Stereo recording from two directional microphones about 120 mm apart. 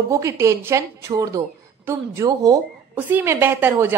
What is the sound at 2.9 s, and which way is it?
A woman's voice, 15° right (ahead or behind).